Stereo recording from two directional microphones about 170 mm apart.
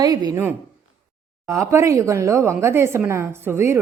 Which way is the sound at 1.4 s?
15° right (ahead or behind).